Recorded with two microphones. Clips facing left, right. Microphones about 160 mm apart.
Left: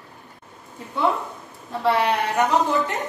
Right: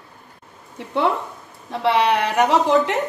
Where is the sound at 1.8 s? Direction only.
85° right.